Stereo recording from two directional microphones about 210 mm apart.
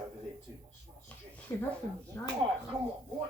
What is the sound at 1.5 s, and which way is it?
Speech, 15° left (ahead or behind).